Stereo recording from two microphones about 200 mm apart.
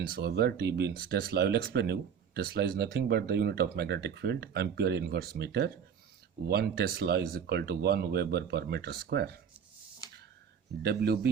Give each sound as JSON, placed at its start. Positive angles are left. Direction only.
{"t": 0.2, "sound": "speech", "side_deg": -55}
{"t": 10.8, "sound": "speech", "side_deg": -55}